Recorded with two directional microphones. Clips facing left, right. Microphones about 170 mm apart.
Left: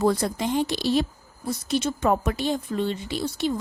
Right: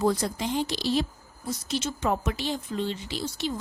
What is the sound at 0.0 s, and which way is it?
A woman's voice, 60° left (ahead or behind).